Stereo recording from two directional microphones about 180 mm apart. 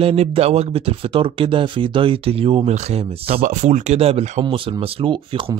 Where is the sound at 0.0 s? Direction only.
35° right (ahead or behind).